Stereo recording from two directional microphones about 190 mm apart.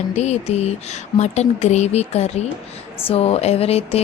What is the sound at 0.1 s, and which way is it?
A woman's voice, 35° left (ahead or behind).